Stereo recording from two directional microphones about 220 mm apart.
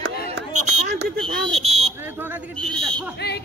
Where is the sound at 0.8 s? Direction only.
45° right (ahead or behind).